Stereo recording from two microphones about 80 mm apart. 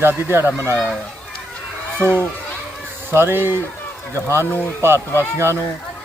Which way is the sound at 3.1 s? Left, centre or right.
Right.